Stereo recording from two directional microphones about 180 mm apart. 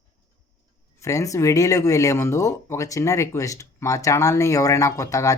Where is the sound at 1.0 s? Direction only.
15° left (ahead or behind).